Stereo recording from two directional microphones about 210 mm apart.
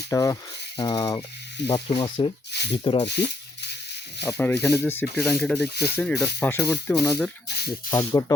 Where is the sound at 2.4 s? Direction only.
55° left (ahead or behind).